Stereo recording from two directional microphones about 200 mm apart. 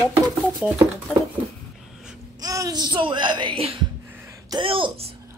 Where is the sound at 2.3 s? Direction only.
20° right (ahead or behind).